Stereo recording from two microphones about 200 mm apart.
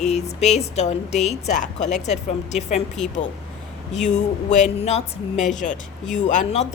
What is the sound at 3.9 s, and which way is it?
A woman's voice, 35° left (ahead or behind).